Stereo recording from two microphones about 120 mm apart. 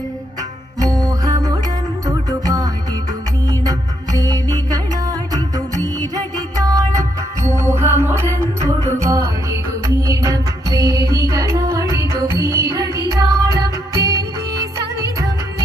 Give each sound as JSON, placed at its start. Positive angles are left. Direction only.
{"t": 0.8, "sound": "music", "side_deg": -30}